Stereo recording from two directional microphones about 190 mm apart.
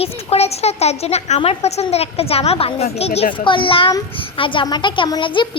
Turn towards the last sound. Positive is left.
turn(degrees=25)  # may be behind; listen again after turning